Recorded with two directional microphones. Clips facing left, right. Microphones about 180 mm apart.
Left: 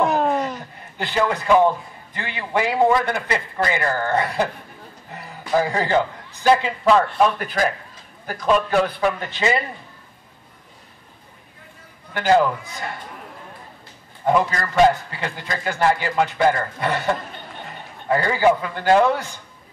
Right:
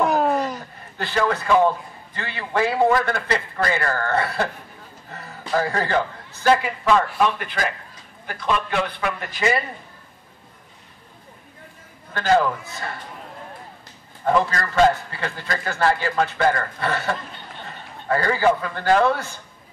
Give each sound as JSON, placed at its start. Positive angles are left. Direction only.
{"t": 0.0, "sound": "a sound", "side_deg": 0}
{"t": 0.9, "sound": "a man's voice", "side_deg": 15}
{"t": 5.1, "sound": "a sound", "side_deg": 15}
{"t": 5.5, "sound": "a man's voice", "side_deg": 15}
{"t": 8.3, "sound": "speech", "side_deg": 40}
{"t": 9.3, "sound": "a man's voice", "side_deg": 20}
{"t": 12.1, "sound": "a man's voice", "side_deg": 15}
{"t": 14.2, "sound": "a man's voice", "side_deg": 15}